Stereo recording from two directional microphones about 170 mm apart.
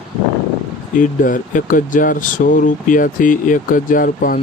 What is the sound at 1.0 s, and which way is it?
Speech, 50° left (ahead or behind).